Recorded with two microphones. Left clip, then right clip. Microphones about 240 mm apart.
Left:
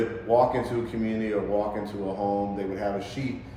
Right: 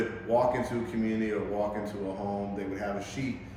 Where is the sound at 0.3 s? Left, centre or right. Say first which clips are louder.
Left 4 dB; centre.